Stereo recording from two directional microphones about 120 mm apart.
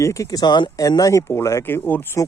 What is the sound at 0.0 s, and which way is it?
Speech, 25° left (ahead or behind).